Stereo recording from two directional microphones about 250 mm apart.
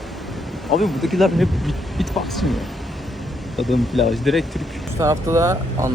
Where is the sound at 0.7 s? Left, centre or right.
Centre.